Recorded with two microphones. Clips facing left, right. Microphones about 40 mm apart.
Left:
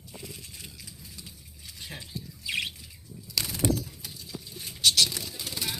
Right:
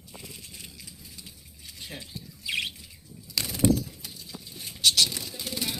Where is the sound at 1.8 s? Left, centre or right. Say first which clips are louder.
Right 1 dB; centre.